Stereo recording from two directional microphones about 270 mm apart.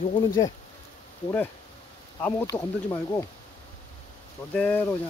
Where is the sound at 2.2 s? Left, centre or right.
Centre.